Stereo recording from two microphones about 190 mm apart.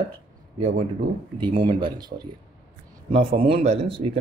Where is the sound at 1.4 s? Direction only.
25° right (ahead or behind).